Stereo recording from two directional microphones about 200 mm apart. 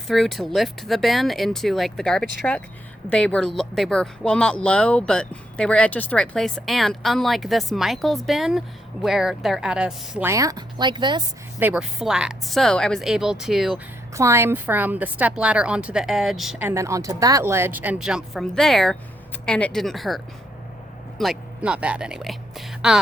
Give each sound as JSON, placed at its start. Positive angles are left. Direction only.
{"t": 0.1, "sound": "a woman's voice", "side_deg": 0}
{"t": 11.6, "sound": "speech", "side_deg": -5}
{"t": 14.1, "sound": "a woman's voice", "side_deg": -15}